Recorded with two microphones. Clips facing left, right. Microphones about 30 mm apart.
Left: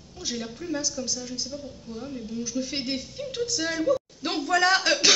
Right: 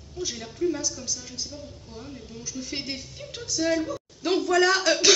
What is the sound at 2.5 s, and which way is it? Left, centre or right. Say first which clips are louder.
Speech: left 2 dB; left.